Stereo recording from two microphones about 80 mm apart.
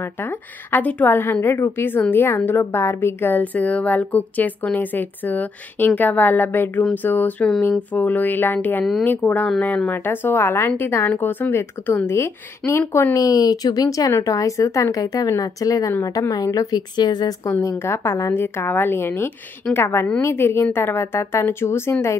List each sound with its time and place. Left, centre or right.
0.2 s a woman's voice: left
16.9 s speech: left
17.5 s a woman's voice: left